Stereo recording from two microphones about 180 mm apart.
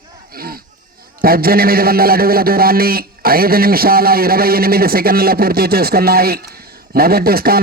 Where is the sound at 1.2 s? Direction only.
55° right (ahead or behind).